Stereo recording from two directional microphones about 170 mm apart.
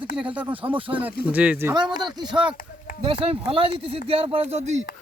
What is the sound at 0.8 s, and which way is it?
Speech, 30° right (ahead or behind).